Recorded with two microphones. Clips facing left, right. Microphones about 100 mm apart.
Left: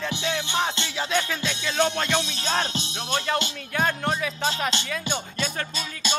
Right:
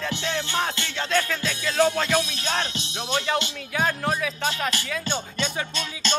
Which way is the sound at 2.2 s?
30° left (ahead or behind).